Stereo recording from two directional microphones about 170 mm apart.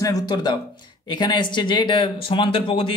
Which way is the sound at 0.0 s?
20° left (ahead or behind).